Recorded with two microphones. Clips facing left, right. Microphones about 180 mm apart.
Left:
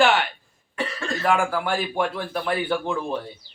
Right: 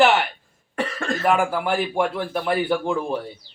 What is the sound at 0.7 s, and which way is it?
Cough, 50° right (ahead or behind).